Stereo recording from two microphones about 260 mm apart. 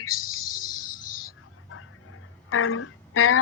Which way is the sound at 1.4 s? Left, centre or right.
Left.